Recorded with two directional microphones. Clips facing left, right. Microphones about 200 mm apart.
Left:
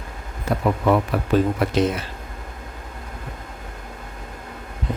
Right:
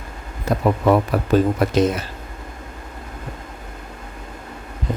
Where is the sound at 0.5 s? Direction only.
40° right (ahead or behind).